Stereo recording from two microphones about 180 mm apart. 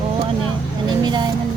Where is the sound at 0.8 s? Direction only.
25° right (ahead or behind).